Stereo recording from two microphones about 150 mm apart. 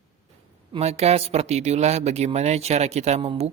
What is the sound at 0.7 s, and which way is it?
Speech, 45° right (ahead or behind).